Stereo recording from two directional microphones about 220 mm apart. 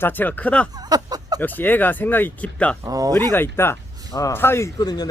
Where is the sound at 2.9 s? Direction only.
15° right (ahead or behind).